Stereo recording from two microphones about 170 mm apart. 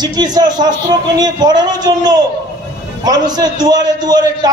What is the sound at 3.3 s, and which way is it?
Speech, 25° right (ahead or behind).